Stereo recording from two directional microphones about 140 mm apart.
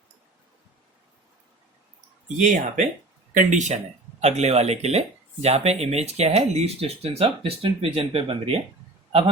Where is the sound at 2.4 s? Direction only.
65° right (ahead or behind).